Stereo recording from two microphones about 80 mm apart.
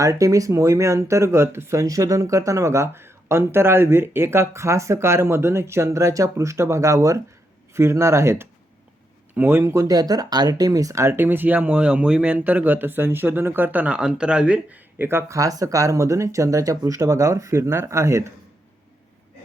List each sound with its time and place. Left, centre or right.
0.0 s a man's voice: right
9.7 s speech: right
11.1 s speech: right
14.9 s speech: right
15.4 s speech: right